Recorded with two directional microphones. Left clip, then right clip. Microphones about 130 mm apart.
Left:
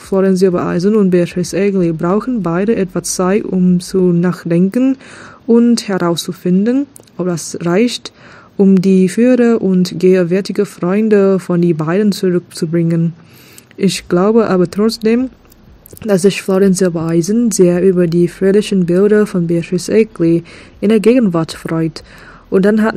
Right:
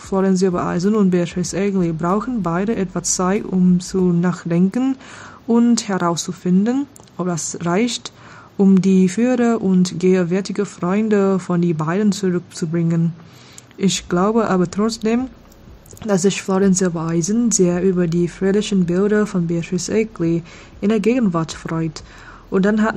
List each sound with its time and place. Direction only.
0.1 s speech: 25° left (ahead or behind)